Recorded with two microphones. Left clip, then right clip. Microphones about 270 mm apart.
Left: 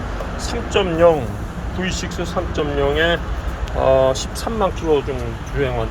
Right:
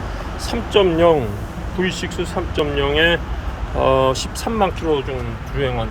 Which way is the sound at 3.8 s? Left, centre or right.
Centre.